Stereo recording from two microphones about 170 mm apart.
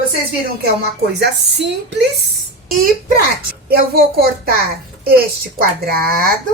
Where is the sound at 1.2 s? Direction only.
85° right.